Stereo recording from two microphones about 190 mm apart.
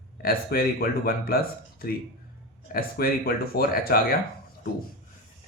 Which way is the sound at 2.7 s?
50° left (ahead or behind).